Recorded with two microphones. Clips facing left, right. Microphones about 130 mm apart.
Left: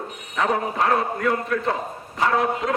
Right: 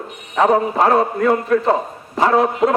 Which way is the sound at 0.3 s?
35° right (ahead or behind).